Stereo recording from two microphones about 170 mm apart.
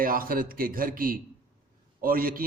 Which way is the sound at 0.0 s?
55° right (ahead or behind).